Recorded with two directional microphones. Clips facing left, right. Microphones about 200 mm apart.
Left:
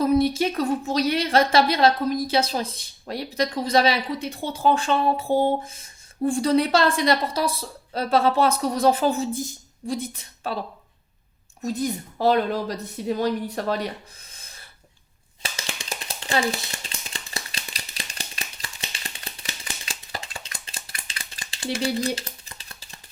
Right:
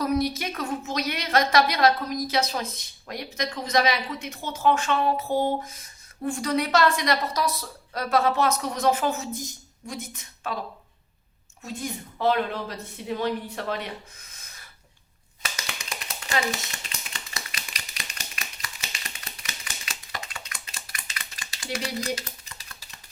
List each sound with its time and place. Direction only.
0.0 s a woman's voice: 25° left (ahead or behind)
11.6 s a woman's voice: 40° left (ahead or behind)
15.4 s a sound: 30° left (ahead or behind)